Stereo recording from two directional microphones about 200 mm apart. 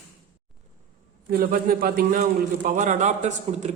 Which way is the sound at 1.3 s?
45° right (ahead or behind).